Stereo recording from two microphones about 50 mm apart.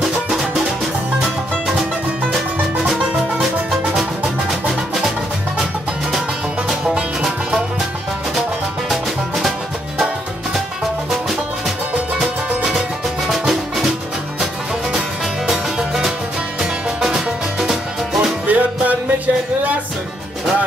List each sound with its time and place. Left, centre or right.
0.0 s music: centre
2.3 s music: centre
4.5 s music: centre
6.7 s music: centre
8.4 s music: centre
11.1 s music: centre
18.5 s music: right